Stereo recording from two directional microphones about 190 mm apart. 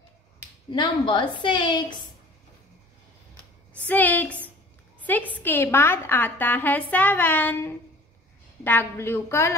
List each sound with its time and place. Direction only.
0.7 s a woman's voice: 25° left (ahead or behind)
3.7 s a woman's voice: 10° left (ahead or behind)